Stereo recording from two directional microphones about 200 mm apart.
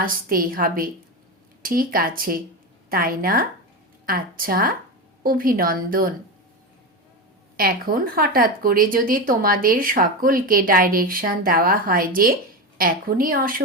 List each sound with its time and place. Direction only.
0.0 s speech: 45° right (ahead or behind)
7.5 s speech: 45° right (ahead or behind)